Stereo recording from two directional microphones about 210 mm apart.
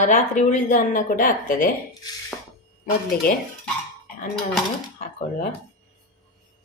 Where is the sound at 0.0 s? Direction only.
35° left (ahead or behind).